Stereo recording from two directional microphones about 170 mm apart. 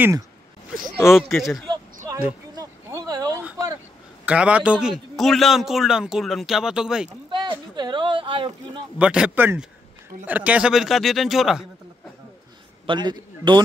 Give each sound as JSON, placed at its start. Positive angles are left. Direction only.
{"t": 0.9, "sound": "a man's voice", "side_deg": 0}
{"t": 2.5, "sound": "a sound", "side_deg": -20}
{"t": 4.3, "sound": "a man's voice", "side_deg": -5}
{"t": 7.2, "sound": "a sound", "side_deg": -30}
{"t": 8.9, "sound": "a man's voice", "side_deg": -5}
{"t": 12.8, "sound": "a man's voice", "side_deg": -25}